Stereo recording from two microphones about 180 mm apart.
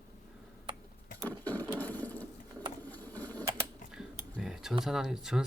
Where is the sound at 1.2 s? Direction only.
10° left (ahead or behind).